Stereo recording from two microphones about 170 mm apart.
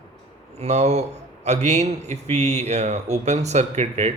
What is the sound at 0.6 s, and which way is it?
Speech, 40° right (ahead or behind).